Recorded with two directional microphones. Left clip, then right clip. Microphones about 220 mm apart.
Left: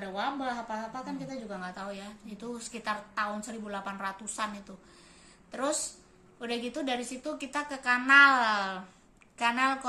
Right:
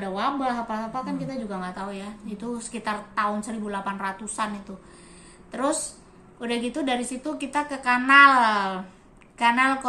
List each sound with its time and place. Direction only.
0.0 s a woman's voice: 15° left (ahead or behind)